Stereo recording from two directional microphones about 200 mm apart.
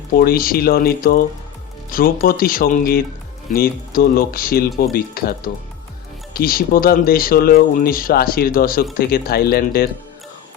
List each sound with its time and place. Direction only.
0.2 s speech: 45° left (ahead or behind)
6.3 s speech: 50° left (ahead or behind)